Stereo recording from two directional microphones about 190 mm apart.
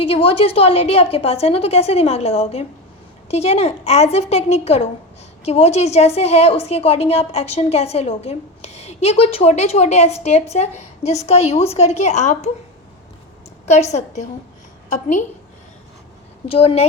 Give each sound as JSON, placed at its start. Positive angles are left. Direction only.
{"t": 0.0, "sound": "a woman's voice", "side_deg": 30}
{"t": 13.7, "sound": "a woman's voice", "side_deg": 35}
{"t": 16.5, "sound": "a woman's voice", "side_deg": 30}